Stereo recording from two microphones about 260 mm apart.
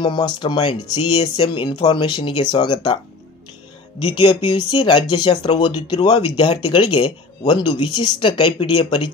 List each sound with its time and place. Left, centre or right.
0.0 s speech: centre
4.0 s speech: centre